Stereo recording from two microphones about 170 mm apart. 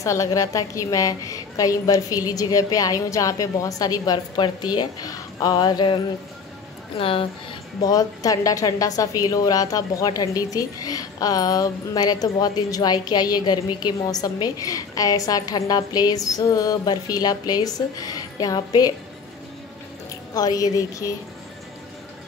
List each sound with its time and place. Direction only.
0.0 s a woman's voice: 20° left (ahead or behind)
7.0 s speech: 30° left (ahead or behind)
7.8 s a woman's voice: 20° left (ahead or behind)
20.3 s a woman's voice: 20° left (ahead or behind)